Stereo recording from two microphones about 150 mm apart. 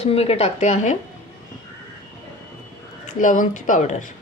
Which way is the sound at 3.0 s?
60° left (ahead or behind).